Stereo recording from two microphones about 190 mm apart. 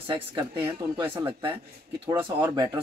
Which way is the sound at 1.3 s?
25° right (ahead or behind).